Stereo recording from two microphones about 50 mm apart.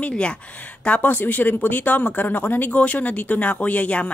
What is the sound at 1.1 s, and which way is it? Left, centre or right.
Speech, left.